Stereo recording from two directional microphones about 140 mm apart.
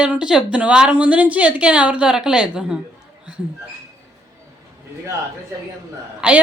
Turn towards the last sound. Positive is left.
turn(degrees=-10)  # may be behind; listen again after turning